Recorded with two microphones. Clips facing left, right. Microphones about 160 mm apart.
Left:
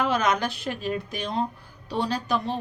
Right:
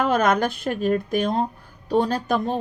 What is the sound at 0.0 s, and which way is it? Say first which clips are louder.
A woman's voice: right 4 dB; 50° right (ahead or behind).